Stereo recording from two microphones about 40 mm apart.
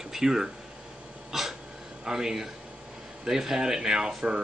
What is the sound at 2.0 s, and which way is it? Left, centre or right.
Speech, centre.